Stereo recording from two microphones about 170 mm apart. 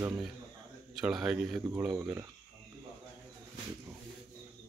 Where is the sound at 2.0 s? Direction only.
20° right (ahead or behind).